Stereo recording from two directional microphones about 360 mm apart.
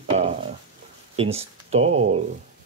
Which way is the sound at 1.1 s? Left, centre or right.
Centre.